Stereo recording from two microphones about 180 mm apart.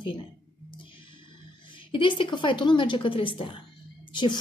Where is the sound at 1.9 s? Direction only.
30° left (ahead or behind).